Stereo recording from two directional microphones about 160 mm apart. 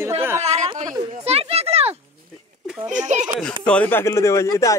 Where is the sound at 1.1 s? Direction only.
40° right (ahead or behind).